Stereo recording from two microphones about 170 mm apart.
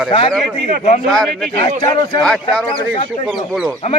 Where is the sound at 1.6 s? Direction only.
25° left (ahead or behind).